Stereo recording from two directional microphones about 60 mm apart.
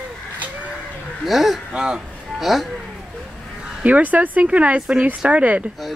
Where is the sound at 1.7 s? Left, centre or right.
Centre.